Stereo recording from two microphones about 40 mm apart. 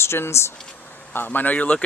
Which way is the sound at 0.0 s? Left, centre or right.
Left.